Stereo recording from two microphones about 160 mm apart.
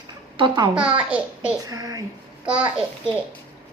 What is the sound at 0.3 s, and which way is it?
Speech, 30° right (ahead or behind).